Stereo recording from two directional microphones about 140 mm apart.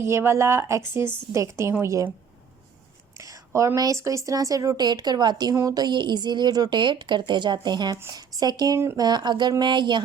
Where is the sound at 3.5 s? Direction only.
20° right (ahead or behind).